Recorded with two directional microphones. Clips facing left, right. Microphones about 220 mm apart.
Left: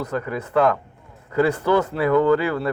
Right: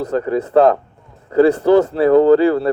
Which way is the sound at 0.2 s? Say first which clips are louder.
Right 8 dB; 35° right (ahead or behind).